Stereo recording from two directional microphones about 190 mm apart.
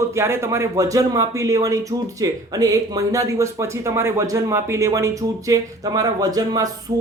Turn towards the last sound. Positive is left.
turn(degrees=-15)  # may be behind; listen again after turning